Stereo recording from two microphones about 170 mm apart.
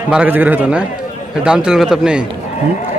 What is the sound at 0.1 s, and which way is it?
A man's voice, 10° right (ahead or behind).